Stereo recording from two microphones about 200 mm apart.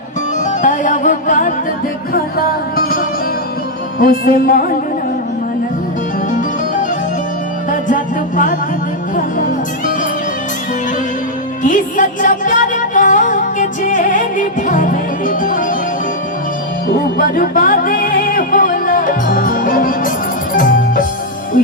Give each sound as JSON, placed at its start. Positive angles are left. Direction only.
{"t": 0.6, "sound": "music", "side_deg": 40}
{"t": 4.0, "sound": "music", "side_deg": 45}
{"t": 7.7, "sound": "music", "side_deg": 40}
{"t": 11.6, "sound": "music", "side_deg": 40}
{"t": 17.2, "sound": "music", "side_deg": 45}